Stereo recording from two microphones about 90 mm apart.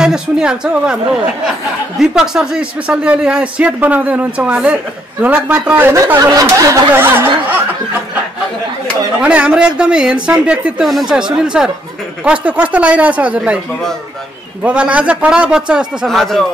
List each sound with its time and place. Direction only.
0.0 s speech: 10° right (ahead or behind); by 6.1 s 25° right (ahead or behind)
6.1 s speech: 35° right (ahead or behind)
6.9 s speech: 25° right (ahead or behind)
9.2 s speech: 15° right (ahead or behind)
10.8 s speech: centre (ahead or behind)
14.6 s speech: 15° right (ahead or behind)
16.1 s speech: centre (ahead or behind)